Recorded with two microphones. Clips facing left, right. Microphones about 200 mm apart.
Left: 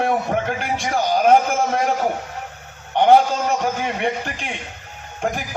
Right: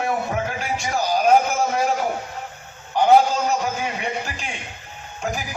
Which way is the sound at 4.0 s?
55° left (ahead or behind).